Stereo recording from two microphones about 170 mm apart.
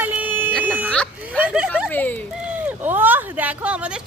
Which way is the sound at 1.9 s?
10° left (ahead or behind).